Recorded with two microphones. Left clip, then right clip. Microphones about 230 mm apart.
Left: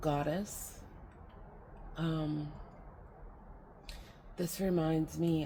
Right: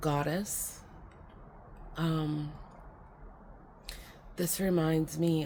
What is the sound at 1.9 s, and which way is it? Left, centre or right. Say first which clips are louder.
Speech: right 3 dB; right.